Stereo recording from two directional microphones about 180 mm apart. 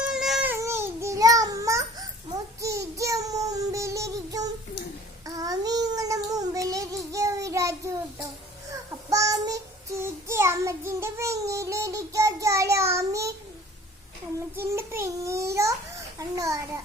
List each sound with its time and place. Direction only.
0.0 s babbling: 5° right (ahead or behind)
2.6 s child singing: 15° right (ahead or behind)
14.5 s babbling: 15° right (ahead or behind)
16.1 s a sound: 15° right (ahead or behind)